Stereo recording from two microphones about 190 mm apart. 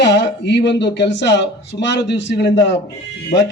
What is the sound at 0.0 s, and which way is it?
A man's voice, 65° left (ahead or behind).